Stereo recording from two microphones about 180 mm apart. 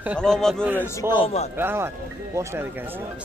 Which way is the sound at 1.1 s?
35° left (ahead or behind).